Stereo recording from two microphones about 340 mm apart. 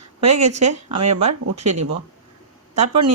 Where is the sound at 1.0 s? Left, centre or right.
Right.